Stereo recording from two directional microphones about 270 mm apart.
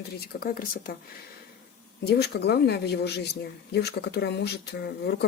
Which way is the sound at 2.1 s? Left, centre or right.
Left.